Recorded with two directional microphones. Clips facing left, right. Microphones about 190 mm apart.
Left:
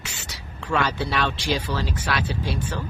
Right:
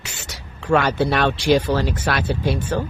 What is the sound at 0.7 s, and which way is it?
Speech, 55° right (ahead or behind).